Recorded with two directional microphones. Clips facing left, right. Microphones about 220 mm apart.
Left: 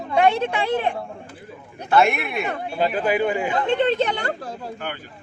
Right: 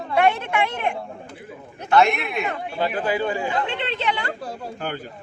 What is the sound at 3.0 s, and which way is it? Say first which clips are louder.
Speech: left 2 dB; 20° left (ahead or behind).